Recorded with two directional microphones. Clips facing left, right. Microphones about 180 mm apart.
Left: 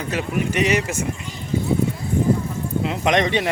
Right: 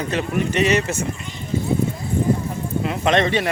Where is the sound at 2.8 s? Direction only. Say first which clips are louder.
Right 1 dB; 15° left (ahead or behind).